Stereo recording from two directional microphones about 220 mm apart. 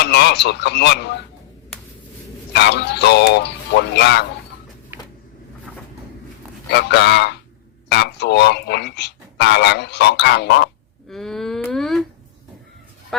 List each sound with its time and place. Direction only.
0.0 s speech: 50° left (ahead or behind)
2.5 s speech: 50° left (ahead or behind)
6.7 s speech: 50° left (ahead or behind)
11.1 s wail: centre (ahead or behind)